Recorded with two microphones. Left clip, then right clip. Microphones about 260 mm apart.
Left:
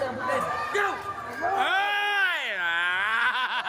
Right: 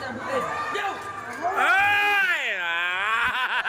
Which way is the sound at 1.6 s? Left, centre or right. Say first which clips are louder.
Right 6 dB; centre.